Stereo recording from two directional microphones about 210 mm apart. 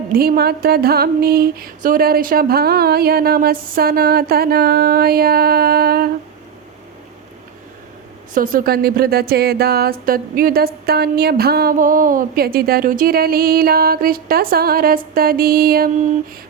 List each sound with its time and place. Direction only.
0.1 s speech: 45° right (ahead or behind)
8.3 s speech: 40° right (ahead or behind)